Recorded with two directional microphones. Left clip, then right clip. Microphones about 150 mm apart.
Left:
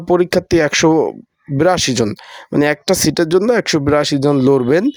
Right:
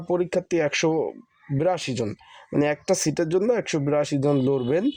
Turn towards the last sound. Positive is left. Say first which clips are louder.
# left 10 dB
turn(degrees=45)  # may be behind; listen again after turning